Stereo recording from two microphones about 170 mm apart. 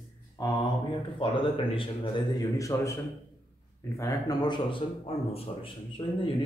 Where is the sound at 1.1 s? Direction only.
30° left (ahead or behind).